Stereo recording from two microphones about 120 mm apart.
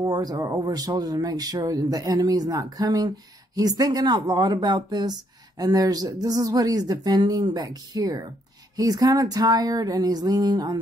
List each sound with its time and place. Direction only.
0.0 s speech: 30° right (ahead or behind)